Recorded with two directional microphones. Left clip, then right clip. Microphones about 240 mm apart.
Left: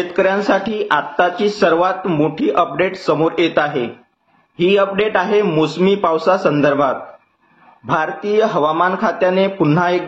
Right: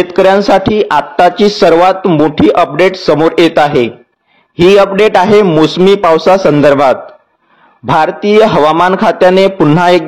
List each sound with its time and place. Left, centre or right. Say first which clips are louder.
0.1 s music: right 8 dB; right
7.9 s music: right 9 dB; right